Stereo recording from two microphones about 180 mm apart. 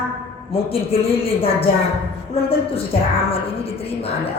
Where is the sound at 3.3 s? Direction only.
35° left (ahead or behind).